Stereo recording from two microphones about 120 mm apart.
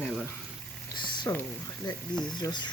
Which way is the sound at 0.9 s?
40° left (ahead or behind).